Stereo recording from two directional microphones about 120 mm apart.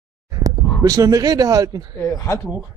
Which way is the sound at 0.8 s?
30° right (ahead or behind).